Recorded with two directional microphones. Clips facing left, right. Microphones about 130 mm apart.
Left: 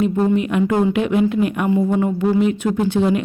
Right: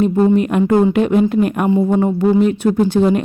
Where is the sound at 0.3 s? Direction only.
45° right (ahead or behind).